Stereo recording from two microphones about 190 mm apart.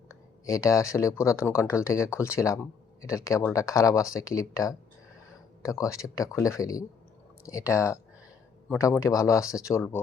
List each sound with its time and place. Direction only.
0.1 s speech: 15° left (ahead or behind)